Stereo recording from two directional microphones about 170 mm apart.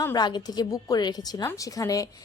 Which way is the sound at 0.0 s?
20° left (ahead or behind).